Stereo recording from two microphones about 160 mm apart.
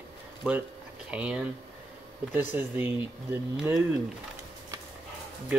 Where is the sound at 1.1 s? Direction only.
5° right (ahead or behind).